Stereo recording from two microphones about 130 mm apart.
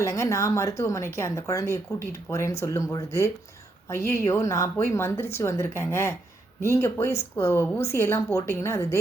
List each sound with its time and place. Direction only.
0.0 s speech: 25° left (ahead or behind)